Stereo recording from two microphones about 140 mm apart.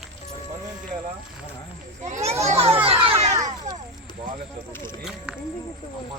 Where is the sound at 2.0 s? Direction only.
55° right (ahead or behind).